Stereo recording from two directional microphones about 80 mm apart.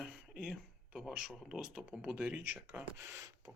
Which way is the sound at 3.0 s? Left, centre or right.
Right.